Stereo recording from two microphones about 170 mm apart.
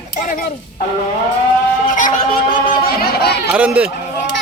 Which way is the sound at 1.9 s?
50° left (ahead or behind).